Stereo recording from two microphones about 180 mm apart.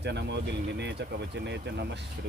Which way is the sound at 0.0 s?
70° right (ahead or behind).